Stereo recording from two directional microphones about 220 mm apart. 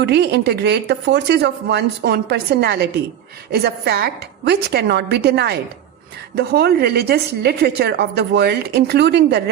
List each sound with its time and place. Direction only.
0.0 s a woman's voice: 50° right (ahead or behind)